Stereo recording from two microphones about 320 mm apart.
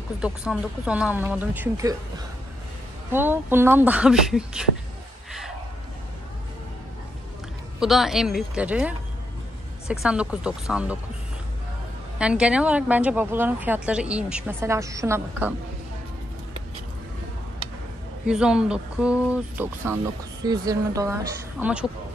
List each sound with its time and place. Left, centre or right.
0.2 s a woman's voice: centre
7.8 s a woman's voice: centre
12.2 s a woman's voice: centre
18.2 s a woman's voice: centre